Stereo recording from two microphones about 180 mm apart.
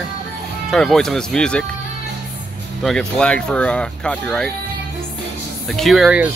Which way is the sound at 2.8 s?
5° left (ahead or behind).